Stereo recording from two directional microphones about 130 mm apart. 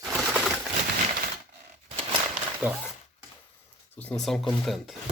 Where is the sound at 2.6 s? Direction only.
15° right (ahead or behind).